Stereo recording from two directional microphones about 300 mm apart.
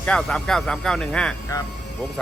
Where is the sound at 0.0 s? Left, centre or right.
Centre.